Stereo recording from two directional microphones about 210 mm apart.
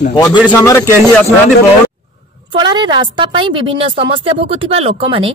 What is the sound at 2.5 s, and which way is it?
Speech, 20° right (ahead or behind).